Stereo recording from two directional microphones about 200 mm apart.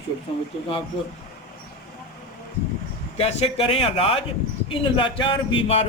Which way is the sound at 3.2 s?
30° left (ahead or behind).